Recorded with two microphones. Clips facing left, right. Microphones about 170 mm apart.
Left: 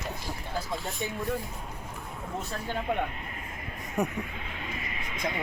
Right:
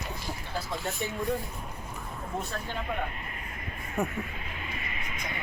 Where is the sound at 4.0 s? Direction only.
15° left (ahead or behind).